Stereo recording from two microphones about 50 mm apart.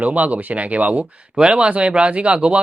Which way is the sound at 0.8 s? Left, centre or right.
Right.